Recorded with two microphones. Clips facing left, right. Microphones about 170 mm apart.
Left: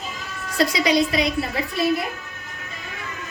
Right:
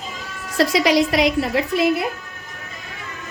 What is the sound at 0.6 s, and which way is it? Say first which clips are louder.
A woman's voice: right 3 dB; 90° right.